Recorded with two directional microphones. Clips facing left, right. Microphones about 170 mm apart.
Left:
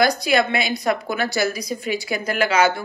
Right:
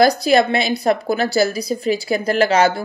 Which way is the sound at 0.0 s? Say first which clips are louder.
Right 5 dB; 35° right (ahead or behind).